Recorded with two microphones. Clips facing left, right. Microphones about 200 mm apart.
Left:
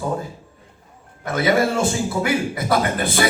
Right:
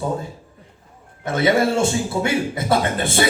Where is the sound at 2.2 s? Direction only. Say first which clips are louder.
Left 1 dB; 25° right (ahead or behind).